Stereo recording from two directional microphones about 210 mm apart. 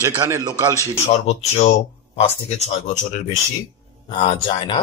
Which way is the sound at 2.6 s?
35° left (ahead or behind).